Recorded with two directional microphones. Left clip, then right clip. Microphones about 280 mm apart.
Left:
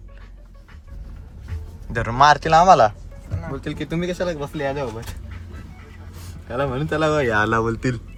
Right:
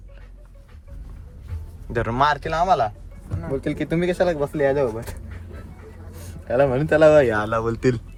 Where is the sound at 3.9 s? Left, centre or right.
Right.